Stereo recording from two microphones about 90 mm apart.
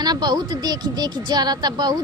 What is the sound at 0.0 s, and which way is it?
Speech, 50° right (ahead or behind).